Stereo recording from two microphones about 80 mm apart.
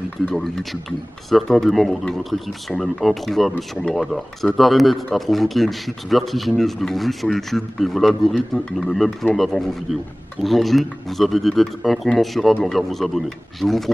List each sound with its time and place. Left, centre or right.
0.3 s speech: centre